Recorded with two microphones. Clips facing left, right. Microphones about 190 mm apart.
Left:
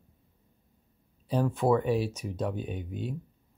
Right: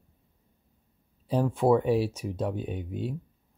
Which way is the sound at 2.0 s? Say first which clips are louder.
Right 2 dB; 30° right (ahead or behind).